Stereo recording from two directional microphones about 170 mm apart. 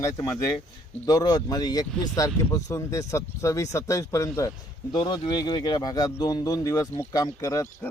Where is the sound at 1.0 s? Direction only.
25° left (ahead or behind).